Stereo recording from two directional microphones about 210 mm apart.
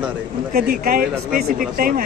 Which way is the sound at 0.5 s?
45° right (ahead or behind).